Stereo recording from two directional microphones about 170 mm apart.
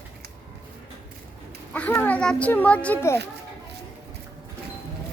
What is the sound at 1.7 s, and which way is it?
Speech, 10° left (ahead or behind).